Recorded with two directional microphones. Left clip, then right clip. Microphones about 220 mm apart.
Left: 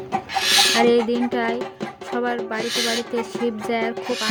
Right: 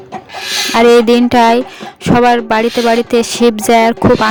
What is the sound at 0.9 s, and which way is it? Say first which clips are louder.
Speech: right 11 dB; 50° right (ahead or behind).